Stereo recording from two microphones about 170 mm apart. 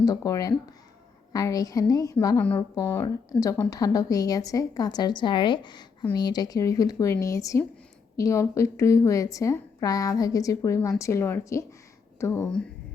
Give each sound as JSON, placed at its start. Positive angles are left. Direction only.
{"t": 0.0, "sound": "a woman's voice", "side_deg": 20}